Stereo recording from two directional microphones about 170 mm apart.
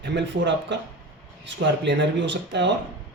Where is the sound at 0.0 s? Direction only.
90° right.